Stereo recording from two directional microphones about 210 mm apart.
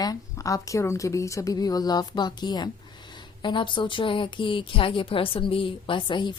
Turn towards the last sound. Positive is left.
turn(degrees=20)  # may be behind; listen again after turning